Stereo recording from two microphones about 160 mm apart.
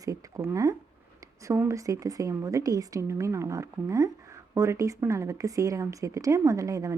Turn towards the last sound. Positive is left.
turn(degrees=-20)  # may be behind; listen again after turning